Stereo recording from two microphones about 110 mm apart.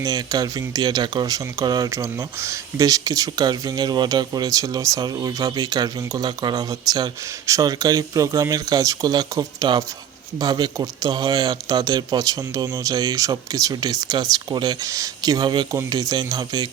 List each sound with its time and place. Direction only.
0.0 s speech: 35° right (ahead or behind)